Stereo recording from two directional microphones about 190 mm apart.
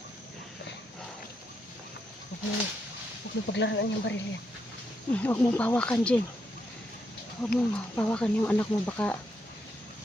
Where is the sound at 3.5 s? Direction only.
70° left (ahead or behind).